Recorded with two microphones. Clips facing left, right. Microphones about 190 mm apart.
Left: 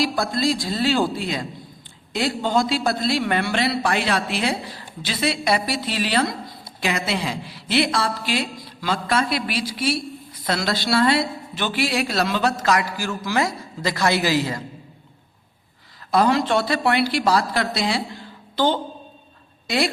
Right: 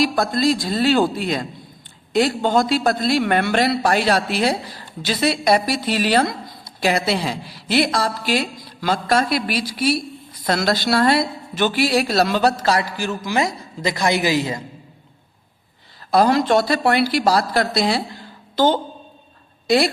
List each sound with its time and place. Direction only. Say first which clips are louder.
0.0 s a man's voice: right 3 dB; 50° right (ahead or behind); by 14.6 s 20° right (ahead or behind)
16.1 s a woman's voice: right 3 dB; 40° right (ahead or behind)